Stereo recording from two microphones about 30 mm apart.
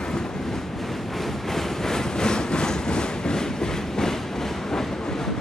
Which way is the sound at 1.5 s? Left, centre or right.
Centre.